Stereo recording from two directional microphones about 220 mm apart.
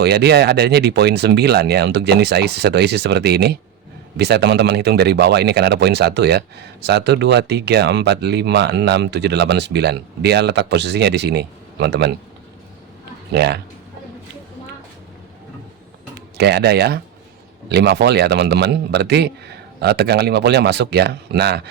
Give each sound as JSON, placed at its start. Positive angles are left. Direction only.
{"t": 0.0, "sound": "speech", "side_deg": -50}
{"t": 13.3, "sound": "speech", "side_deg": -50}
{"t": 16.4, "sound": "speech", "side_deg": -50}